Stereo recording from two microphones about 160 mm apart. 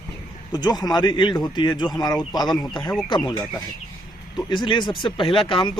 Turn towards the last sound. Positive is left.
turn(degrees=35)  # may be behind; listen again after turning